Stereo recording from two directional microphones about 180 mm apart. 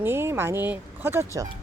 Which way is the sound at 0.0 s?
15° right (ahead or behind).